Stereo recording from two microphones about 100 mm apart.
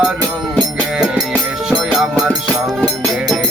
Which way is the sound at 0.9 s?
10° right (ahead or behind).